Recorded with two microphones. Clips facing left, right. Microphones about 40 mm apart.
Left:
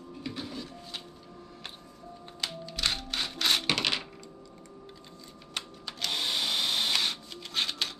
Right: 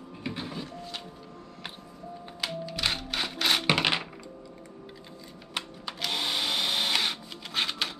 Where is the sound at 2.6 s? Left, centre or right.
Centre.